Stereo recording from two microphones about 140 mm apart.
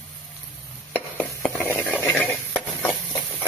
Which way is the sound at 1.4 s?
10° left (ahead or behind).